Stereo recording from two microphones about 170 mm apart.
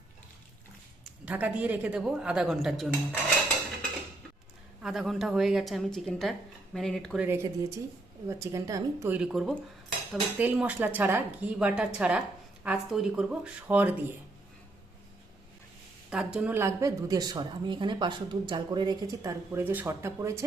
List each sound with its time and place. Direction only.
1.0 s speech: 10° right (ahead or behind)
4.8 s speech: 5° right (ahead or behind)
16.0 s speech: 5° right (ahead or behind)